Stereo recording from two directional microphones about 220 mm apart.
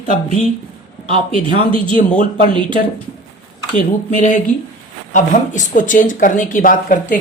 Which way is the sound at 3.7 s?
35° left (ahead or behind).